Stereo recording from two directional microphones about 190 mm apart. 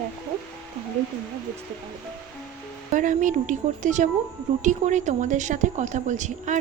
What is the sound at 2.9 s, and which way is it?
Speech, 40° right (ahead or behind).